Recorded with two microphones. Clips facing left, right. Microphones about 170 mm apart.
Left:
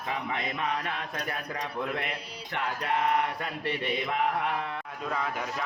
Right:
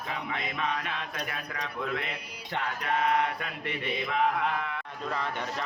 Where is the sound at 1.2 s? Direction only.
35° left (ahead or behind).